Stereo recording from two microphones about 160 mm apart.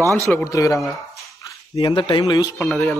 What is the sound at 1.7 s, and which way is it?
Speech, 30° left (ahead or behind).